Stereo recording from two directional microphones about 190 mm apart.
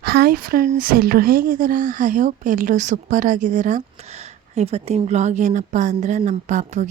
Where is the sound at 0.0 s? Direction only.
55° right (ahead or behind).